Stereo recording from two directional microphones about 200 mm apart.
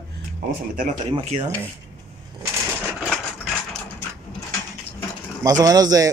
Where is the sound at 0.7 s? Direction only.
35° right (ahead or behind).